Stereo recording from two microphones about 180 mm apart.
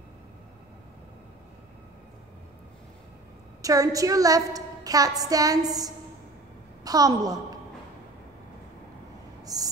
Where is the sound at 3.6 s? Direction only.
20° right (ahead or behind).